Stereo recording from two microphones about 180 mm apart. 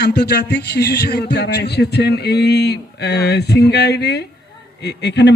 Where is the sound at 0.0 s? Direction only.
65° left (ahead or behind).